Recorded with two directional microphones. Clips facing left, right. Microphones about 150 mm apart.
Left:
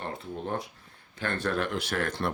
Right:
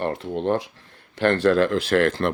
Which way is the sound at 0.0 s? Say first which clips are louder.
Right 11 dB; 80° right.